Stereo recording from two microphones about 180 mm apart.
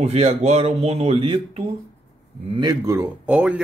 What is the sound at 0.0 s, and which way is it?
Speech, 35° right (ahead or behind).